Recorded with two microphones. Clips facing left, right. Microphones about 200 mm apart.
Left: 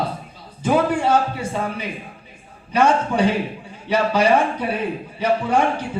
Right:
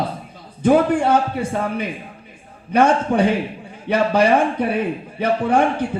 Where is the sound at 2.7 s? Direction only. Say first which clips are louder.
Right 2 dB; 55° right (ahead or behind).